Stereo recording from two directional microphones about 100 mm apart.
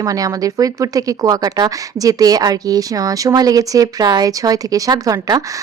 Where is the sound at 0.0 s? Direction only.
35° right (ahead or behind).